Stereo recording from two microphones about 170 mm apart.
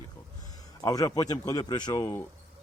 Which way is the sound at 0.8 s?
20° left (ahead or behind).